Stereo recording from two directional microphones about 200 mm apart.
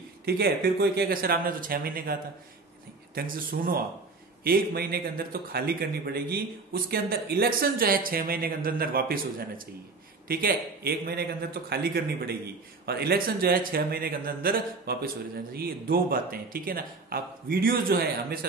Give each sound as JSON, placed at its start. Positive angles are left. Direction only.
{"t": 0.2, "sound": "a man's voice", "side_deg": -50}
{"t": 3.2, "sound": "a man's voice", "side_deg": -45}